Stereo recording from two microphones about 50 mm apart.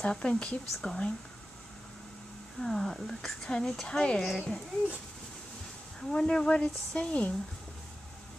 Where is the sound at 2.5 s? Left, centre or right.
Centre.